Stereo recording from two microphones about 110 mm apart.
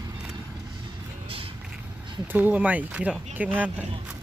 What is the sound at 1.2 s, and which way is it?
Vehicle, 55° right (ahead or behind).